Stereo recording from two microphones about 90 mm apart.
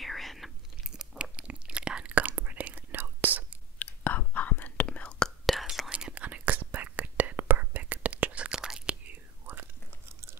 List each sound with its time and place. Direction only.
0.0 s chewing: centre (ahead or behind); by 3.5 s 20° right (ahead or behind)
3.8 s whispering: 20° left (ahead or behind)
5.5 s whispering: centre (ahead or behind)
5.9 s whispering: 15° right (ahead or behind)